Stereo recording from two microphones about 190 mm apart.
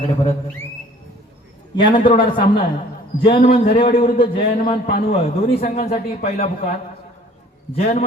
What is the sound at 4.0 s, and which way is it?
A man's voice, 30° left (ahead or behind).